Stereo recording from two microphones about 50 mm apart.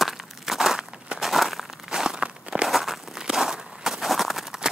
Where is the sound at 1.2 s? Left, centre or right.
Centre.